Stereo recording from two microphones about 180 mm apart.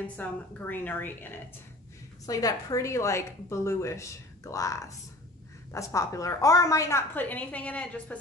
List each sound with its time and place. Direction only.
0.0 s a woman's voice: 10° left (ahead or behind)